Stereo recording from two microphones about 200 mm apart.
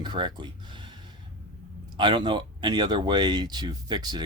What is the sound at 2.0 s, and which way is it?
Speech, 25° right (ahead or behind).